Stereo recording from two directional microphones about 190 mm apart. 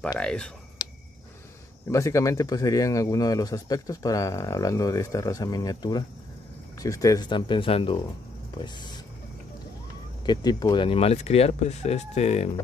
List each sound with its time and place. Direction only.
0.2 s speech: 5° left (ahead or behind)
0.8 s a sound: 20° left (ahead or behind)
1.9 s speech: 15° left (ahead or behind)
10.2 s speech: 20° left (ahead or behind)